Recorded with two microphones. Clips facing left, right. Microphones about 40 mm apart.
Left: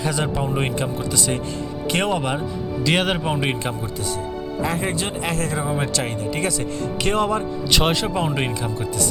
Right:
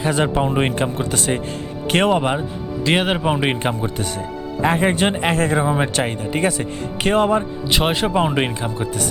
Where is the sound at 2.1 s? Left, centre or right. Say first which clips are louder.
Right 4 dB; right.